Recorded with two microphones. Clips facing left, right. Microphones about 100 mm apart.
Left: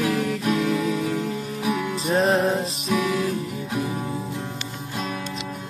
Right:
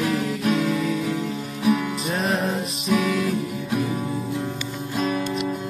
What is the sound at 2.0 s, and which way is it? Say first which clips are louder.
Music: left 4 dB; 30° left (ahead or behind).